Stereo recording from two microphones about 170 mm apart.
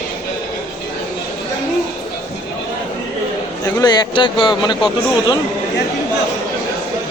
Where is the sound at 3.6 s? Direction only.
25° left (ahead or behind).